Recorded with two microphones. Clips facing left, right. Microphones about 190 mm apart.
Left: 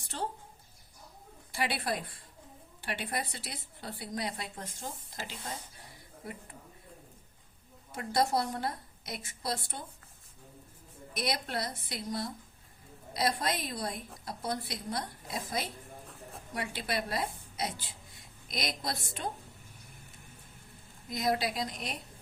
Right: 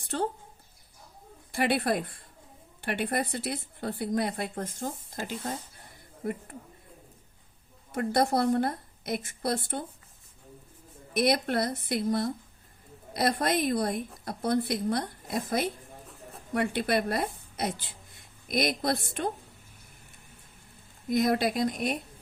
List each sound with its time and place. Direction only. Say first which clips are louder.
0.1 s a woman's voice: right 7 dB; 55° right (ahead or behind)
1.5 s speech: right 7 dB; 55° right (ahead or behind)
7.9 s a woman's voice: right 4 dB; 55° right (ahead or behind)
11.1 s a woman's voice: right 9 dB; 55° right (ahead or behind)
21.1 s speech: right 6 dB; 55° right (ahead or behind)